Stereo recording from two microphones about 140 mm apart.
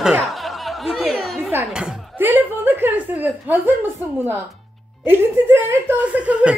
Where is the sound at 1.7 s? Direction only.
5° right (ahead or behind).